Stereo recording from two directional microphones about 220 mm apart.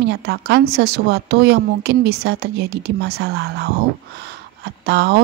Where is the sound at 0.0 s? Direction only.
50° right (ahead or behind).